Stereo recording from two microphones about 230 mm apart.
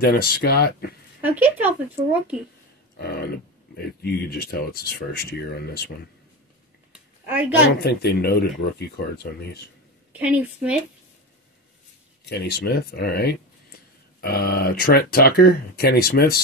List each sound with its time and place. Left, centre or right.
0.0 s speech: left
1.2 s speech: centre
3.0 s speech: left
6.9 s a sound: centre
7.6 s speech: left
10.1 s a woman's voice: centre
12.3 s speech: left